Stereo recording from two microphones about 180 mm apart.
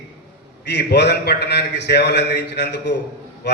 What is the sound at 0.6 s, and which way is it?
A man's voice, 70° left (ahead or behind).